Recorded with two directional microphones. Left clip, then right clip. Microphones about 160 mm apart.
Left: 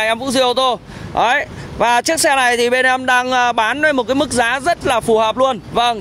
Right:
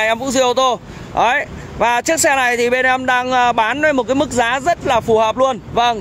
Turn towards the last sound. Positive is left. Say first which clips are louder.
# even
turn(degrees=25)  # may be behind; listen again after turning